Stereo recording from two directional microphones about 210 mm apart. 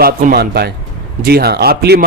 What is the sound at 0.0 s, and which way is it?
A man's voice, 45° right (ahead or behind).